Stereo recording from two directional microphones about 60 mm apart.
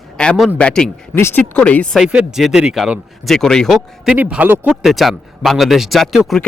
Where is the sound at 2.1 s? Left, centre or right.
Centre.